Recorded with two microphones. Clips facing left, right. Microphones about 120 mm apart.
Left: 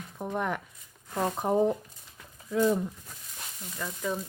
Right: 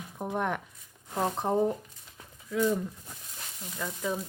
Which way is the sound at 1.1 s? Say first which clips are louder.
Even; 10° right (ahead or behind).